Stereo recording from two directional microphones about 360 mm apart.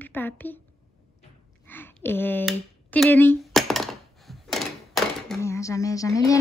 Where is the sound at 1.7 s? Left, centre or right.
Centre.